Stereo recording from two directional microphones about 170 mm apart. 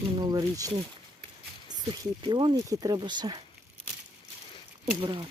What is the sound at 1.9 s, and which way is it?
Speech, 25° right (ahead or behind).